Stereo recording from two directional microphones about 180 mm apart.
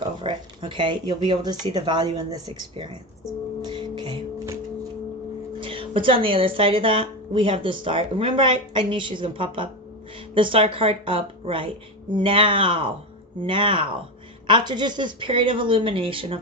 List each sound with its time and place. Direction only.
0.2 s speech: 25° right (ahead or behind)
3.6 s music: 25° right (ahead or behind)
5.5 s speech: 30° right (ahead or behind)